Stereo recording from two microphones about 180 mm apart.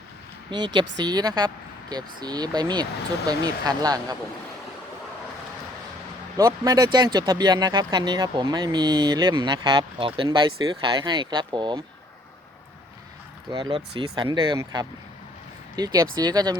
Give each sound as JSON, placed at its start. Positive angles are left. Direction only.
{"t": 0.5, "sound": "speech", "side_deg": -25}
{"t": 6.3, "sound": "speech", "side_deg": -20}
{"t": 13.5, "sound": "speech", "side_deg": -25}